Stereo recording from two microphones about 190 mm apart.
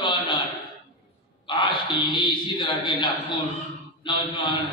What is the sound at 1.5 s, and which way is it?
A man's voice, 25° left (ahead or behind).